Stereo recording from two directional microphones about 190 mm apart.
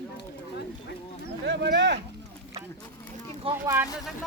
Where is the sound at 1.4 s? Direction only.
65° right (ahead or behind).